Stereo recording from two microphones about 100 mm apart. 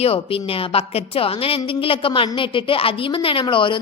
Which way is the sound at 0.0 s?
70° left (ahead or behind).